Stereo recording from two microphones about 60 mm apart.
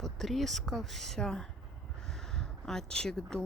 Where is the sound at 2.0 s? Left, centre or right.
Centre.